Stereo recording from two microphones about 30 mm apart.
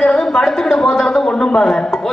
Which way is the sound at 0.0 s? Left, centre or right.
Centre.